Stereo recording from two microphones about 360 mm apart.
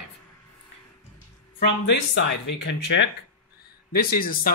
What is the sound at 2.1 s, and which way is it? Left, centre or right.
Speech, left.